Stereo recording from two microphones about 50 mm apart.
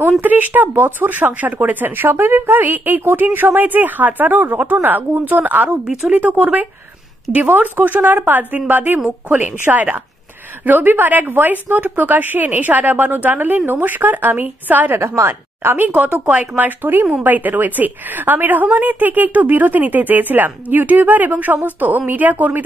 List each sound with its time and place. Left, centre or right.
0.2 s speech: right
15.0 s speech: right
15.9 s speech: right